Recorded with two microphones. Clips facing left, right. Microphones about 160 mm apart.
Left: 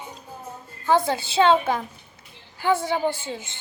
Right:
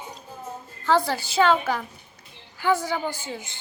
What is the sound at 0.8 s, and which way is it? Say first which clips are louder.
A woman's voice: left 1 dB; 20° left (ahead or behind).